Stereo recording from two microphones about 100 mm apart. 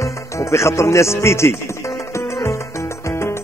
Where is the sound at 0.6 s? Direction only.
30° left (ahead or behind).